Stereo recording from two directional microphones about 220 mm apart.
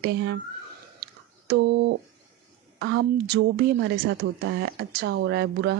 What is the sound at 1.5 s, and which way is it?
Speech, 55° right (ahead or behind).